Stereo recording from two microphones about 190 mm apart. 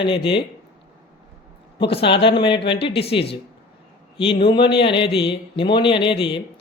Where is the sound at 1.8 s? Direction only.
30° left (ahead or behind).